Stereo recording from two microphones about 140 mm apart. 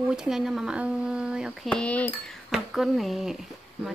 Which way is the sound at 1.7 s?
10° left (ahead or behind).